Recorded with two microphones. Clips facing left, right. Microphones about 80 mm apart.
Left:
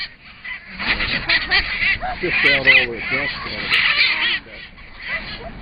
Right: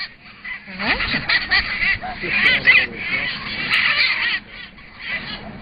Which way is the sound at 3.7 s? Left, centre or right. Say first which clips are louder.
Even; centre.